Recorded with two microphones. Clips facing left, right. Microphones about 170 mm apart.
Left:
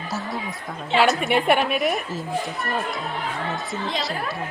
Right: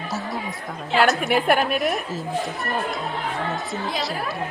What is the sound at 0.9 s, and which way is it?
Speech, centre (ahead or behind).